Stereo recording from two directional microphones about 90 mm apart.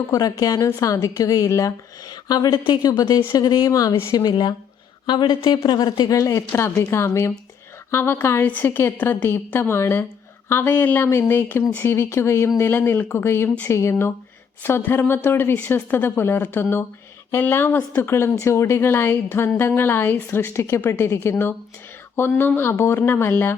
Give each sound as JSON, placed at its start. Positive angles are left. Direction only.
{"t": 0.1, "sound": "speech", "side_deg": 40}
{"t": 6.1, "sound": "speech", "side_deg": 35}